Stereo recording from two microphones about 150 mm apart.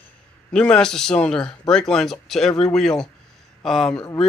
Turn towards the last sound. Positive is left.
turn(degrees=5)  # may be behind; listen again after turning